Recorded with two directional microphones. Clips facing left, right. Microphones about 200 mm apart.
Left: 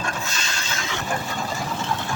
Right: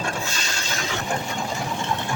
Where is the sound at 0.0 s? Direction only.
30° right (ahead or behind).